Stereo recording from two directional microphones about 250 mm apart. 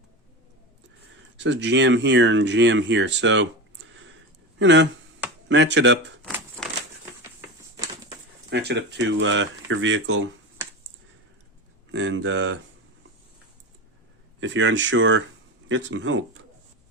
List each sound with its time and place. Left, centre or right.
1.4 s speech: right
6.2 s a sound: centre
8.4 s speech: right
11.9 s speech: right
14.4 s speech: right